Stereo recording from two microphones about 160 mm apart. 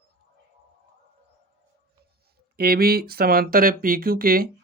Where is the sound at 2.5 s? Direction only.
70° right (ahead or behind).